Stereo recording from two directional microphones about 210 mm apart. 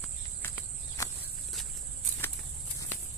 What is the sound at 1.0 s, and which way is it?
Walk, 15° left (ahead or behind).